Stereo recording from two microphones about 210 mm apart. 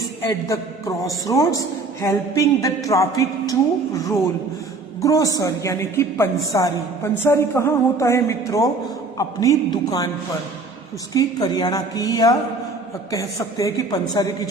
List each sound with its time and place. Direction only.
0.0 s a man's voice: 15° left (ahead or behind)
11.1 s a woman's voice: 15° left (ahead or behind)